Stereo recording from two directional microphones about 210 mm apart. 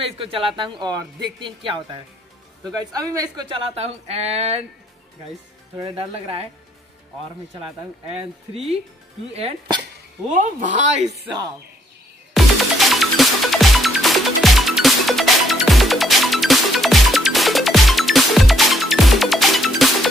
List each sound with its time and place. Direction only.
0.0 s a woman's voice: 25° right (ahead or behind)
2.8 s speech: 15° right (ahead or behind)
3.6 s a woman's voice: 30° right (ahead or behind)
5.8 s a woman's voice: 25° right (ahead or behind)
9.3 s a woman's voice: 30° right (ahead or behind)
12.4 s music: centre (ahead or behind)